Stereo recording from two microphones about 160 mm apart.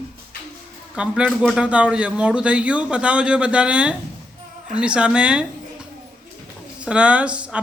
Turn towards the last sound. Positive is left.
turn(degrees=-5)  # may be behind; listen again after turning